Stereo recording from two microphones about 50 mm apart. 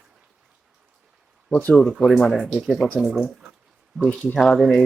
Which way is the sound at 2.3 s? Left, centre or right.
Centre.